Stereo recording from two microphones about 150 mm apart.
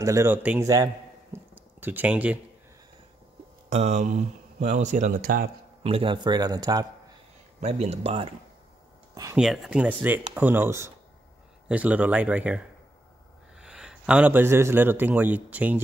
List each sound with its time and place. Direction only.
0.0 s speech: 20° right (ahead or behind)
1.3 s a sound: 10° right (ahead or behind)
3.7 s speech: 50° right (ahead or behind); by 5.5 s 65° right (ahead or behind)
5.8 s a man's voice: 40° right (ahead or behind)
7.6 s speech: 45° right (ahead or behind)
9.1 s speech: 25° right (ahead or behind)
9.4 s a man's voice: centre (ahead or behind)